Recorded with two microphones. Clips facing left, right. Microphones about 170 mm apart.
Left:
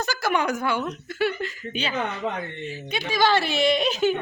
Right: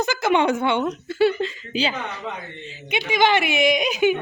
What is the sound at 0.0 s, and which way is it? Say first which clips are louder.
A woman's voice: right 5 dB; 20° right (ahead or behind).